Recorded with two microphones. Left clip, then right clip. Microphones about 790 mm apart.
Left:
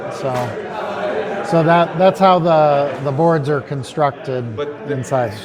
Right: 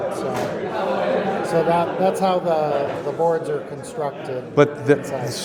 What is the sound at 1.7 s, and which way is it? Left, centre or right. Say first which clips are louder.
A man's voice: left 6 dB; left.